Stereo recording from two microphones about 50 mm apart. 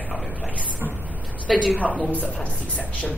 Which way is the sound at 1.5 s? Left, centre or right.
Centre.